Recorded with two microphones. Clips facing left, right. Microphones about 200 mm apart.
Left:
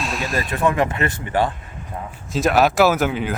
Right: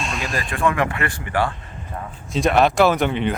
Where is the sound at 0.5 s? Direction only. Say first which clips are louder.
Left 1 dB; 20° left (ahead or behind).